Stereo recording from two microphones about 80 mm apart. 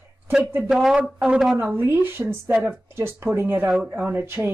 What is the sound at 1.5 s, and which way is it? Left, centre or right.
Speech, right.